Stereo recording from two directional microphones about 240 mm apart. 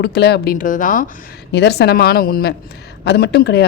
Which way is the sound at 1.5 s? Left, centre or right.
Left.